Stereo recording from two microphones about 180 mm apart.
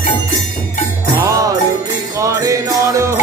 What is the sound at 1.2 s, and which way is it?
Music, 20° right (ahead or behind).